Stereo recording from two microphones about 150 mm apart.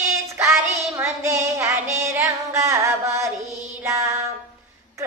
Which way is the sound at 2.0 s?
20° right (ahead or behind).